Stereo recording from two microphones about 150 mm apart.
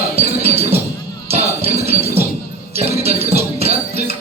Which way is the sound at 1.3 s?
45° right (ahead or behind).